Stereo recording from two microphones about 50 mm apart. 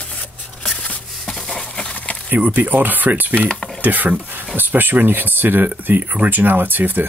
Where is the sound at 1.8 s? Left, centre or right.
Left.